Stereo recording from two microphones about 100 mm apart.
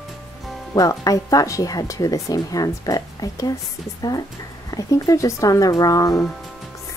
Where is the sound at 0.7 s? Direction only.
35° left (ahead or behind).